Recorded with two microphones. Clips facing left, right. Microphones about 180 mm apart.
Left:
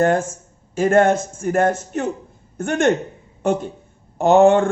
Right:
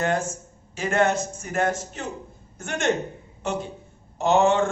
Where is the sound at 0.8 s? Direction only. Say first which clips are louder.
Left 7 dB; 50° left (ahead or behind).